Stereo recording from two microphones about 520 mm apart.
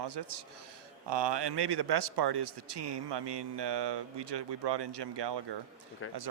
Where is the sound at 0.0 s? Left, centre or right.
Right.